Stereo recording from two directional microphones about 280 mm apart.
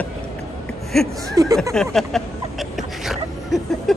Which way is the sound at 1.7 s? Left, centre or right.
Centre.